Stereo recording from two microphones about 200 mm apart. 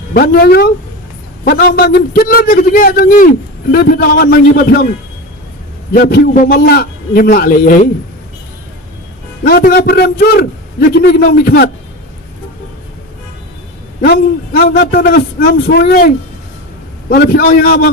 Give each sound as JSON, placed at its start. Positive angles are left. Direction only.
{"t": 0.1, "sound": "a man's voice", "side_deg": 50}
{"t": 5.9, "sound": "a man's voice", "side_deg": 50}
{"t": 9.4, "sound": "a man's voice", "side_deg": 50}
{"t": 14.0, "sound": "a man's voice", "side_deg": 50}